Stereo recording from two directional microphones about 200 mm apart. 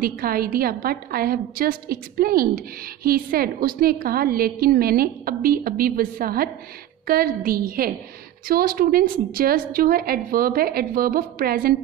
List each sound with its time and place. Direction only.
0.0 s a woman's voice: 50° right (ahead or behind)